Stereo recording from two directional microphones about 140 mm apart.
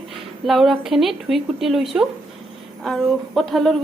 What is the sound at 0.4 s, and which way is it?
A woman's voice, centre (ahead or behind).